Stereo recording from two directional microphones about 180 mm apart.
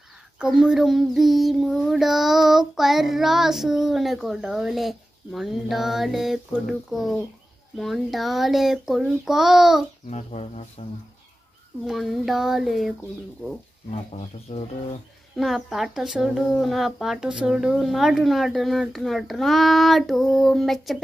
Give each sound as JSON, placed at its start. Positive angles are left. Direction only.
{"t": 0.4, "sound": "child singing", "side_deg": -5}
{"t": 10.0, "sound": "speech", "side_deg": 35}
{"t": 11.8, "sound": "child singing", "side_deg": 0}
{"t": 14.1, "sound": "speech", "side_deg": 30}
{"t": 15.3, "sound": "child singing", "side_deg": 0}